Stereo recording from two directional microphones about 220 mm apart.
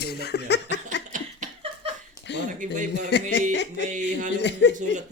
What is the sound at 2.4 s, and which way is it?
Speech, 35° right (ahead or behind).